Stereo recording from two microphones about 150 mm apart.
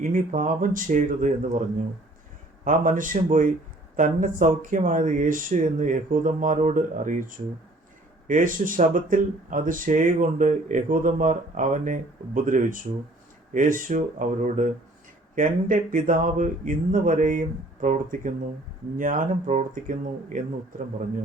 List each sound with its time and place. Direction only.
0.0 s speech: 60° right (ahead or behind)
2.6 s speech: 60° right (ahead or behind)